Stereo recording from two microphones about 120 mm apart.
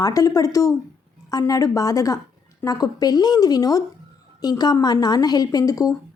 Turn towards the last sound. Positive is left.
turn(degrees=30)  # may be behind; listen again after turning